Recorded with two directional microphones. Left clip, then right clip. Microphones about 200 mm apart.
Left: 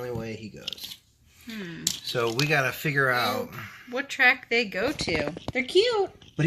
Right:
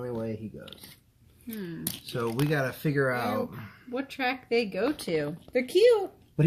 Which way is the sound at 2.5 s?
25° left (ahead or behind).